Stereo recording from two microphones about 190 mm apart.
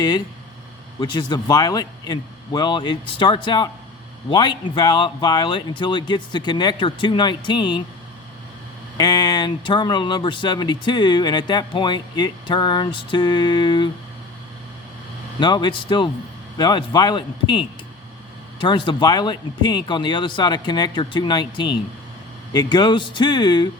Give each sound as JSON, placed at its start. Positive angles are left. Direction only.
{"t": 0.9, "sound": "speech", "side_deg": 20}
{"t": 9.0, "sound": "speech", "side_deg": 20}
{"t": 15.4, "sound": "speech", "side_deg": 25}